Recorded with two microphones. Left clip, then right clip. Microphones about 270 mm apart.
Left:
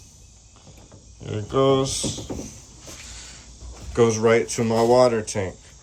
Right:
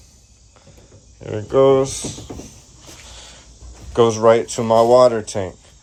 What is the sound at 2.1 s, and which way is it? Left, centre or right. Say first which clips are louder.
Speech: left 1 dB; centre.